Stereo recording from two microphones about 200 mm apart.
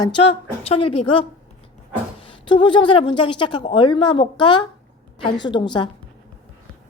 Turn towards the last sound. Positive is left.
turn(degrees=20)  # may be behind; listen again after turning